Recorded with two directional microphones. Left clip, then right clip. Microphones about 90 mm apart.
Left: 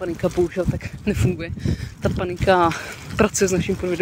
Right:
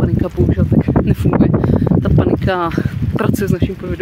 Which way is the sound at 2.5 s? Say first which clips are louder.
Left 1 dB; 15° right (ahead or behind).